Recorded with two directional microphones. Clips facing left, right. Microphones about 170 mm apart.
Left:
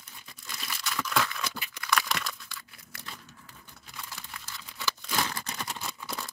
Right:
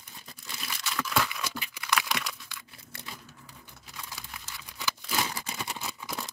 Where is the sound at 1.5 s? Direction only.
5° right (ahead or behind).